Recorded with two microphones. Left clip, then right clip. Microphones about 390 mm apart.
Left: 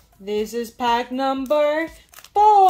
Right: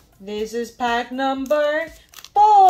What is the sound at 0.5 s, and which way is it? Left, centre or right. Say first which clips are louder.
Speech: even; left.